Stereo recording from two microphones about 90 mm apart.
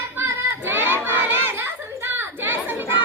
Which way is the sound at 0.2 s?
25° right (ahead or behind).